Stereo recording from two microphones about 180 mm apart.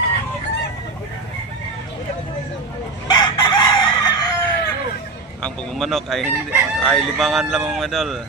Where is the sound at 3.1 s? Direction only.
25° left (ahead or behind).